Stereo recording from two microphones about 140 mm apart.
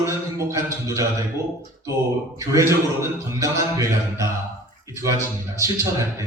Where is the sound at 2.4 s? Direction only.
20° right (ahead or behind).